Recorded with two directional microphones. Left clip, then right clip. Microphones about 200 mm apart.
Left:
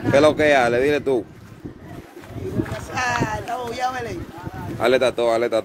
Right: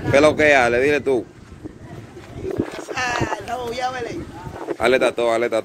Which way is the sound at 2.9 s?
55° left (ahead or behind).